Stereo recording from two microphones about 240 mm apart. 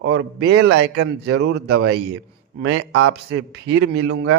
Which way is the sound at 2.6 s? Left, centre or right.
Right.